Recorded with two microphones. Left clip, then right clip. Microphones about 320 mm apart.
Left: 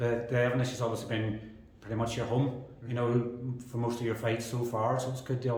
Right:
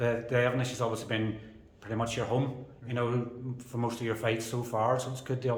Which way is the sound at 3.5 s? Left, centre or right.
Centre.